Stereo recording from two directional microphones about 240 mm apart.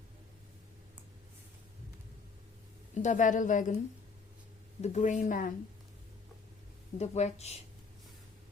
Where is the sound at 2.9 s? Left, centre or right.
Left.